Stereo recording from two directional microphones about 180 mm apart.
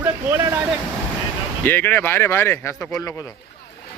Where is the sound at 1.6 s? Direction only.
10° left (ahead or behind).